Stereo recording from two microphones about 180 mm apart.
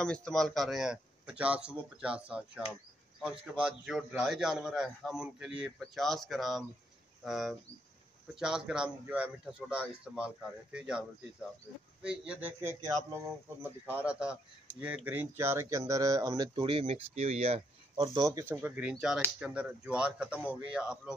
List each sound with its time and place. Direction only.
0.0 s a man's voice: 5° left (ahead or behind)